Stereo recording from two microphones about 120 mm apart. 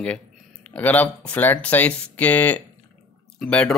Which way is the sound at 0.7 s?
10° left (ahead or behind).